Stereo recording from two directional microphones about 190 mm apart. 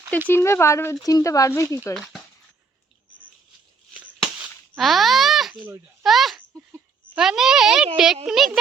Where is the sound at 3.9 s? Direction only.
5° right (ahead or behind).